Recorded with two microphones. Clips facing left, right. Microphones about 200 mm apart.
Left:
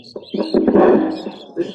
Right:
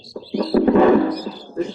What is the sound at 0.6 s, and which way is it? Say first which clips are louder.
Music: left 3 dB; 45° left (ahead or behind).